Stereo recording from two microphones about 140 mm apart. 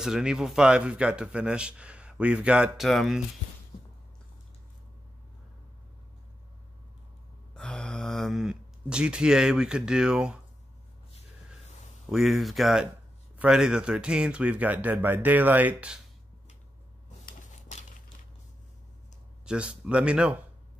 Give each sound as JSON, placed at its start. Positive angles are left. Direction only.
{"t": 0.0, "sound": "speech", "side_deg": -5}
{"t": 7.5, "sound": "speech", "side_deg": 5}
{"t": 12.1, "sound": "speech", "side_deg": 0}
{"t": 17.3, "sound": "a sound", "side_deg": 60}
{"t": 19.4, "sound": "speech", "side_deg": -5}